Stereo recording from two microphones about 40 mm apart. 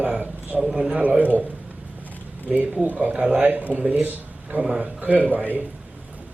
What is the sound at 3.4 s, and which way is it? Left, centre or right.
Speech, right.